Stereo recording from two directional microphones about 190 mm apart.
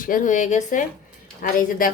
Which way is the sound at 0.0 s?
45° left (ahead or behind).